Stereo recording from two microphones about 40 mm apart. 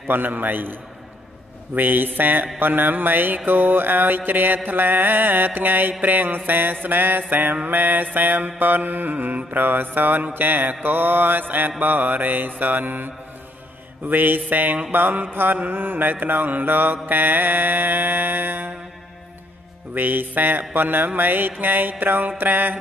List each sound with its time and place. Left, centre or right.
0.1 s mantra: right
1.8 s mantra: right
19.9 s mantra: right